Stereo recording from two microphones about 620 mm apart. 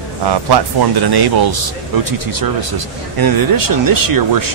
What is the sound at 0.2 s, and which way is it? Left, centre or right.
Speech, right.